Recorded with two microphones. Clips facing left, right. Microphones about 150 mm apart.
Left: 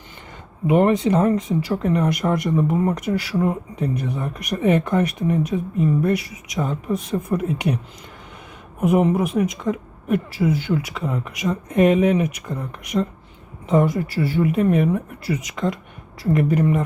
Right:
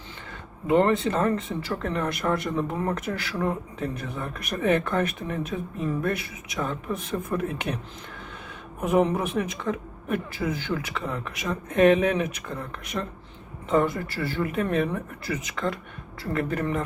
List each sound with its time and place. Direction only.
0.7 s speech: 15° left (ahead or behind)
8.8 s speech: 10° left (ahead or behind)